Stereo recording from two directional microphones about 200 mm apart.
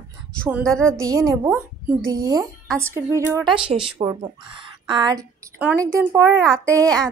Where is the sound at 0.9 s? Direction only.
15° right (ahead or behind).